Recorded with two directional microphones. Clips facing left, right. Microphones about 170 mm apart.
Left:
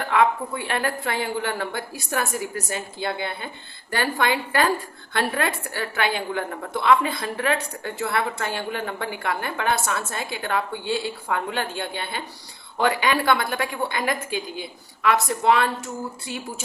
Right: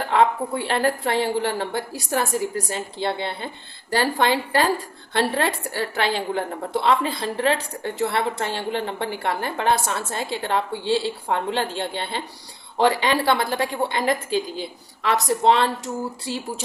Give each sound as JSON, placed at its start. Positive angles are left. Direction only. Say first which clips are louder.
{"t": 0.1, "sound": "a woman's voice", "louder": "right 1 dB", "side_deg": -30}